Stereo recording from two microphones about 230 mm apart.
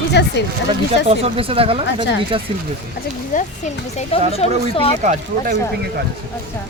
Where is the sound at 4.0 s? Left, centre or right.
Left.